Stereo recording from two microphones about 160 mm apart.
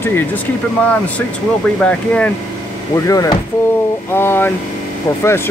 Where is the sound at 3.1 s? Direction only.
20° left (ahead or behind).